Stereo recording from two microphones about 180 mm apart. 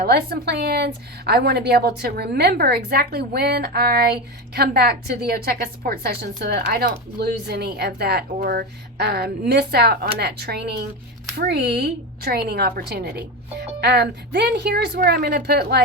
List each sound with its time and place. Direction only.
0.0 s a woman's voice: 65° right (ahead or behind)